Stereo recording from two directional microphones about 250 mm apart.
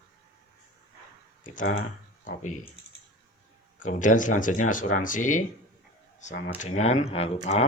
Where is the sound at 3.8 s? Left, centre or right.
Left.